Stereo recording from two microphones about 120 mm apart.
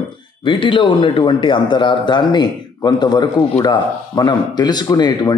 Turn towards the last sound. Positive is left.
turn(degrees=35)  # may be behind; listen again after turning